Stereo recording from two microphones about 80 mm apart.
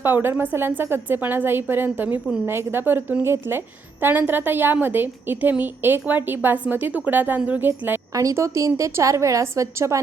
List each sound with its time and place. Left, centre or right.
0.0 s a woman's voice: right
8.1 s a woman's voice: right